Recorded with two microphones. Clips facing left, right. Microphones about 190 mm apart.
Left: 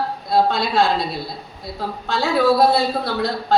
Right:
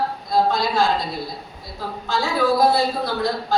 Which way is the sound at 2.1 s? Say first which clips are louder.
Even; 65° left (ahead or behind).